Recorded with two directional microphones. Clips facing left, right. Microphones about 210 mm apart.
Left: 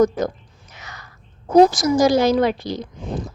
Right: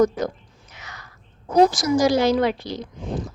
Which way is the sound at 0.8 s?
40° left (ahead or behind).